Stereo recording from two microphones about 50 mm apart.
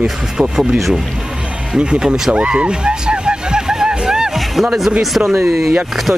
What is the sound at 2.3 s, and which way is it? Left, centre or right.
Hubbub, right.